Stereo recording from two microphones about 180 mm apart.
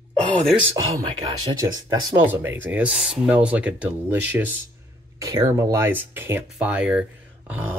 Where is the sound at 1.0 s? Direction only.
20° right (ahead or behind).